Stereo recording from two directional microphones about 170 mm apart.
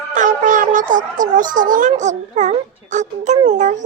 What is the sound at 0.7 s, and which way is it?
A child's voice, 50° right (ahead or behind).